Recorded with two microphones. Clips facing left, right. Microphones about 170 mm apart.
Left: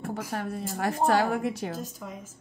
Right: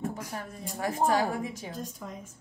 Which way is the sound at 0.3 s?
70° left (ahead or behind).